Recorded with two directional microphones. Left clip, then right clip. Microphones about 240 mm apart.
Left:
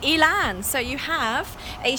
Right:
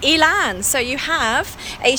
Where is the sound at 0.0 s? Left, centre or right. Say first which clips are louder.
Right 4 dB; centre.